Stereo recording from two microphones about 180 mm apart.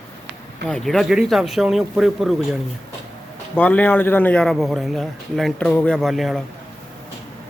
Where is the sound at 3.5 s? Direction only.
10° left (ahead or behind).